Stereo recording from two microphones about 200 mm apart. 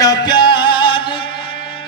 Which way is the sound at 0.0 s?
20° left (ahead or behind).